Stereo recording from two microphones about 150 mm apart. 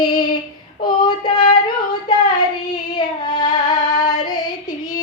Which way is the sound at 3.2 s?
30° left (ahead or behind).